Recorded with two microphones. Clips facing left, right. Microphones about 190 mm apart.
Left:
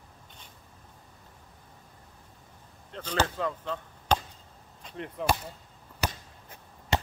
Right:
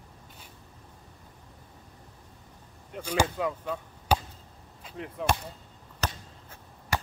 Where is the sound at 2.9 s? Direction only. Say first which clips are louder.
Right 2 dB; 10° right (ahead or behind).